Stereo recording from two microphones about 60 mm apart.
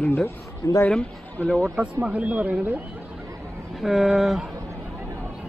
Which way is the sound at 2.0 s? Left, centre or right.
Right.